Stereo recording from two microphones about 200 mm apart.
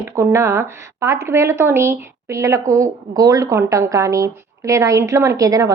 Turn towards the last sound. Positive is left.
turn(degrees=-15)  # may be behind; listen again after turning